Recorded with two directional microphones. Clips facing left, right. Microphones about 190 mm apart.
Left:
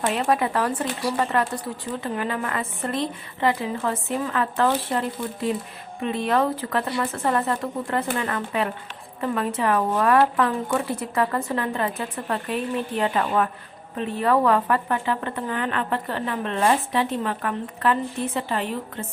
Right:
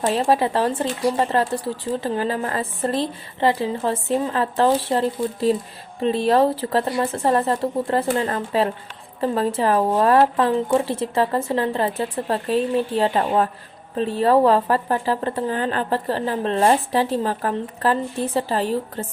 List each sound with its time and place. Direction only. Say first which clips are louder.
0.0 s speech: right 3 dB; 30° right (ahead or behind)